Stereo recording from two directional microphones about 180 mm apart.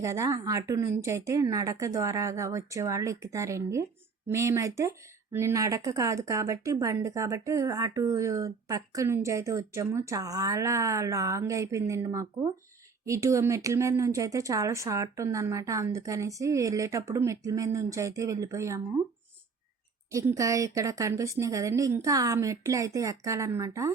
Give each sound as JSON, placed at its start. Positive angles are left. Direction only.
{"t": 0.0, "sound": "speech", "side_deg": -15}
{"t": 20.1, "sound": "speech", "side_deg": -15}